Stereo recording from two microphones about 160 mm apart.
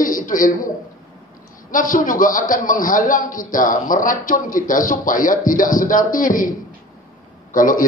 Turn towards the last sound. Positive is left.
turn(degrees=55)  # may be behind; listen again after turning